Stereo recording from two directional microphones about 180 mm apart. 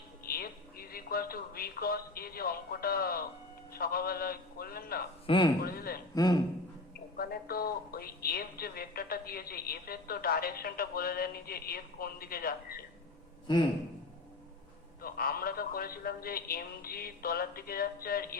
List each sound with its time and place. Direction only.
0.3 s speech: 55° left (ahead or behind)
5.2 s speech: 25° left (ahead or behind)
5.6 s speech: 55° left (ahead or behind)
6.1 s a man's voice: 20° left (ahead or behind)
7.2 s speech: 55° left (ahead or behind)
15.0 s speech: 55° left (ahead or behind)